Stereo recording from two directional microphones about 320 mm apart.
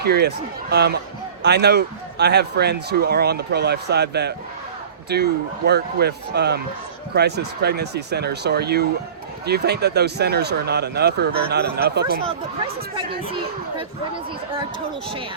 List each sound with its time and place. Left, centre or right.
0.0 s a man's voice: right